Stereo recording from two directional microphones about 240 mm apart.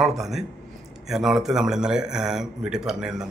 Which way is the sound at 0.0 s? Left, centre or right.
Centre.